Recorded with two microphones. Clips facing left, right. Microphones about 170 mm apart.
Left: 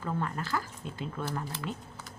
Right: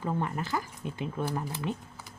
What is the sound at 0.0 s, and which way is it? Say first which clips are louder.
Speech: right 2 dB; 20° right (ahead or behind).